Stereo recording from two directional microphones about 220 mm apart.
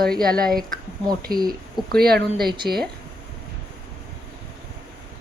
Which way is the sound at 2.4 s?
20° right (ahead or behind).